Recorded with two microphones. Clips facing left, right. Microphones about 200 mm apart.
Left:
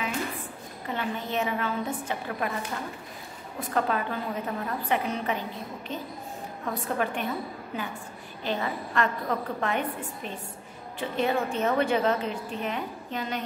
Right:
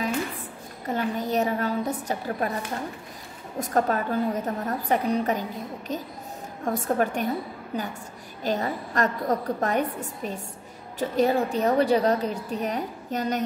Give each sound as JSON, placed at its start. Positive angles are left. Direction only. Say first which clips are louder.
{"t": 0.8, "sound": "a woman's voice", "louder": "right 5 dB", "side_deg": -40}
{"t": 3.5, "sound": "a woman's voice", "louder": "right 3 dB", "side_deg": -45}